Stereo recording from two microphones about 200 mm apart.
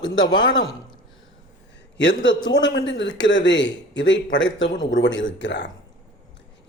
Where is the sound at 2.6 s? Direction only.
65° left (ahead or behind).